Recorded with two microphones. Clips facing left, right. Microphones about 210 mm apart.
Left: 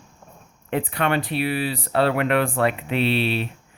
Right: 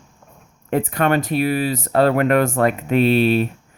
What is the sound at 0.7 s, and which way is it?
Speech, 45° right (ahead or behind).